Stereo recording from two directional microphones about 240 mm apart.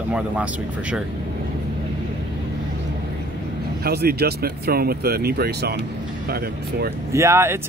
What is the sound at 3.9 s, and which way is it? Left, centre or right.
Speech, right.